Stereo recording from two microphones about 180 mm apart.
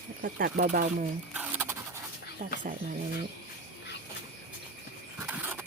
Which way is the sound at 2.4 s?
55° right (ahead or behind).